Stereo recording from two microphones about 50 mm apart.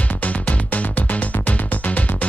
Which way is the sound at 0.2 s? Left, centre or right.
Left.